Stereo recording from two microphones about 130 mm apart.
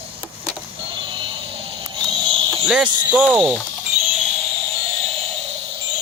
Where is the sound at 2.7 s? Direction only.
5° right (ahead or behind).